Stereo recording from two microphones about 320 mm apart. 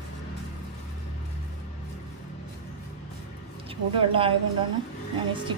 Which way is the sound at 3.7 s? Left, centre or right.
Centre.